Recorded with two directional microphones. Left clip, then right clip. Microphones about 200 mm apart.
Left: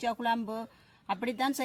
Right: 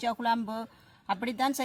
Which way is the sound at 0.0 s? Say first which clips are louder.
Right 2 dB; 30° right (ahead or behind).